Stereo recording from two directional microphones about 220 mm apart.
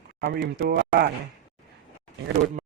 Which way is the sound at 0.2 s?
45° right (ahead or behind).